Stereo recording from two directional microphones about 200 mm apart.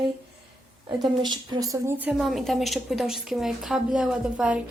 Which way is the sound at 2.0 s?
Centre (ahead or behind).